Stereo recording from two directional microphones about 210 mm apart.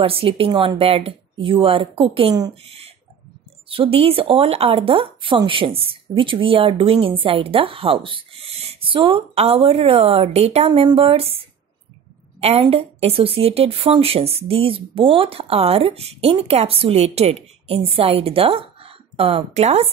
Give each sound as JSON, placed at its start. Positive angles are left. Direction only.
{"t": 0.0, "sound": "speech", "side_deg": -25}
{"t": 12.4, "sound": "speech", "side_deg": -30}